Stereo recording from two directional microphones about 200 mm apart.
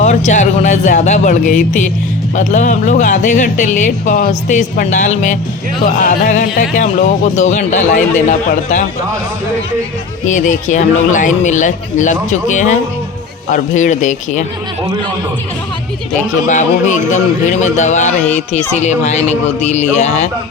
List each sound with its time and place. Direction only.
0.0 s speech: 35° left (ahead or behind)
10.2 s speech: 40° left (ahead or behind)
16.5 s speech: 35° left (ahead or behind)